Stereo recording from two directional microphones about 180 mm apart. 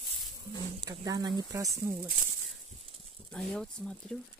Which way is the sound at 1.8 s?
55° right (ahead or behind).